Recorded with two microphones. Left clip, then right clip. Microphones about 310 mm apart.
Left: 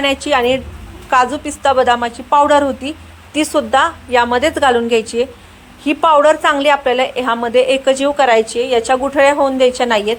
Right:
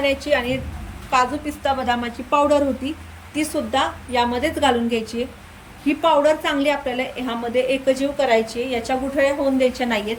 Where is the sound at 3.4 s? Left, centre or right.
Centre.